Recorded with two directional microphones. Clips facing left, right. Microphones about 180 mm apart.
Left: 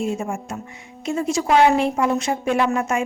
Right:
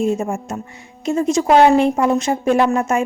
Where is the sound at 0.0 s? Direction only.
40° right (ahead or behind).